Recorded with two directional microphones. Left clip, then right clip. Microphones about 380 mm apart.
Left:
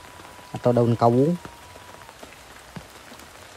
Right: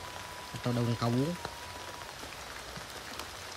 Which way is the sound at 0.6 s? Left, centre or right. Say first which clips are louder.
Left 15 dB; right.